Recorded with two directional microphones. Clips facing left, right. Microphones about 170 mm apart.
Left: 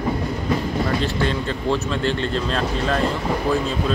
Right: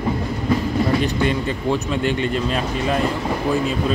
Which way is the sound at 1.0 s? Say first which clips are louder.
Right 2 dB; 15° right (ahead or behind).